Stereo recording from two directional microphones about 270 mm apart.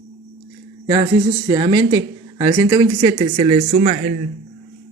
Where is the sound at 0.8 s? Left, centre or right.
Centre.